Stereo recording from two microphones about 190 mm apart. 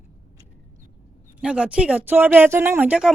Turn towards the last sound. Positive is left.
turn(degrees=-5)  # may be behind; listen again after turning